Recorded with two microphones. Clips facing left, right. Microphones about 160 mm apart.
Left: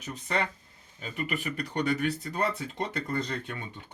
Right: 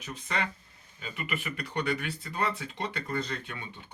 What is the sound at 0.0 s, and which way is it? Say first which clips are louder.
Speech: left 3 dB; 40° left (ahead or behind).